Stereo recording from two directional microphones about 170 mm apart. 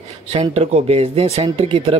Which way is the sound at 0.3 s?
35° right (ahead or behind).